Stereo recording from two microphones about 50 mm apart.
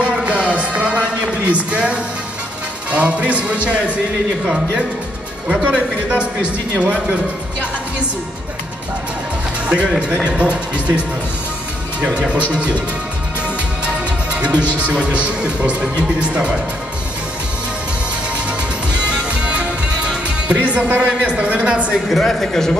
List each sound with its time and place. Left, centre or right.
0.0 s music: right
1.5 s a man's voice: right
5.5 s a man's voice: centre
9.7 s a man's voice: right
12.0 s a man's voice: right
14.3 s music: right
15.0 s a man's voice: right
18.9 s music: right
20.6 s a man's voice: right
22.1 s speech: centre